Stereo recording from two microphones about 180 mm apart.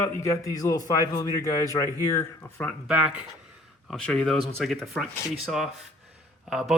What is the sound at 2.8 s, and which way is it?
Speech, 5° right (ahead or behind).